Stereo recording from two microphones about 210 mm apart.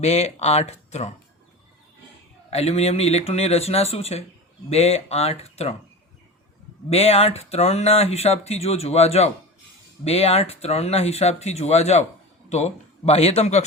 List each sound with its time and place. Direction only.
0.0 s speech: 30° left (ahead or behind)
2.5 s speech: 30° left (ahead or behind)
6.9 s speech: 30° left (ahead or behind)